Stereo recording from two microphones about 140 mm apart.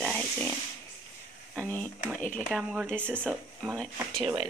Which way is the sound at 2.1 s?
10° left (ahead or behind).